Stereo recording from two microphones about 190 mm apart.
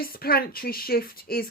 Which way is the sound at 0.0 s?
50° left (ahead or behind).